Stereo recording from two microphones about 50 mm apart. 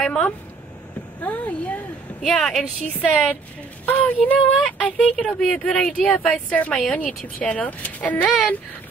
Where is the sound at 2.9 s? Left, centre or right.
Left.